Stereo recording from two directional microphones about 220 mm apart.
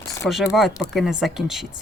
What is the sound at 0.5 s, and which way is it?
Speech, centre (ahead or behind).